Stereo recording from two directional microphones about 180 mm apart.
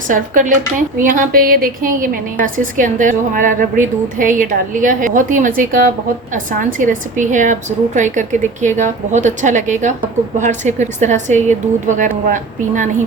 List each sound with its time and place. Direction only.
0.1 s a woman's voice: 45° right (ahead or behind)